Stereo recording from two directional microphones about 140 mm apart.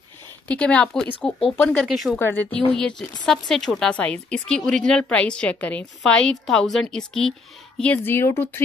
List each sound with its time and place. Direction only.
0.5 s speech: 10° left (ahead or behind)
1.9 s speech: 5° right (ahead or behind)
2.1 s speech: 15° left (ahead or behind)
3.3 s speech: centre (ahead or behind)